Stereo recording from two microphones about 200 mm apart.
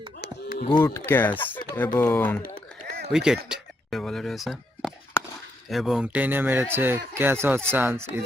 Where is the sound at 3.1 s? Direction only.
5° right (ahead or behind).